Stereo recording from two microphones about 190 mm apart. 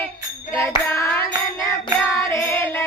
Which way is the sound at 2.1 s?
10° left (ahead or behind).